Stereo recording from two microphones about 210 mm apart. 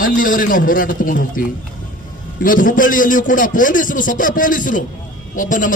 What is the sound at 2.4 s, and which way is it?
A man's voice, 40° left (ahead or behind).